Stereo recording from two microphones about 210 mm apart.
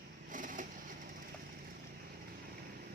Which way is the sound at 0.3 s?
40° right (ahead or behind).